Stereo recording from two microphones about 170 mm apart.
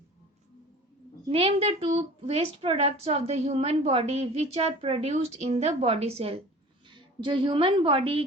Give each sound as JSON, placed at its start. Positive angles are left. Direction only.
{"t": 1.3, "sound": "a woman's voice", "side_deg": -35}